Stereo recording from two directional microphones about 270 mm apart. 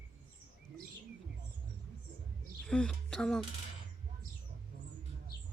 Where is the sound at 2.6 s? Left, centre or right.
Centre.